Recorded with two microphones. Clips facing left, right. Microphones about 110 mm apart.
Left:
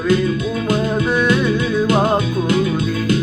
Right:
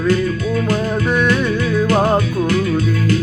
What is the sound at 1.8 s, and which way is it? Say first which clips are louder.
Music: right 1 dB; 20° left (ahead or behind).